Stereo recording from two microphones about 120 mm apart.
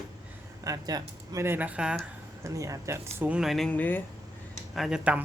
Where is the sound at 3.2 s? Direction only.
5° right (ahead or behind).